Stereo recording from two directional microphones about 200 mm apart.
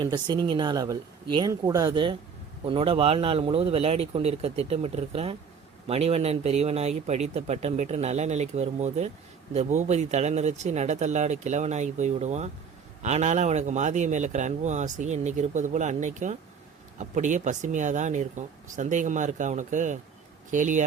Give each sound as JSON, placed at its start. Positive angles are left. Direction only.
{"t": 0.0, "sound": "speech", "side_deg": -20}